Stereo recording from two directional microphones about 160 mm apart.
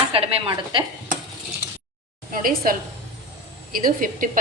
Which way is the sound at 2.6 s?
65° right (ahead or behind).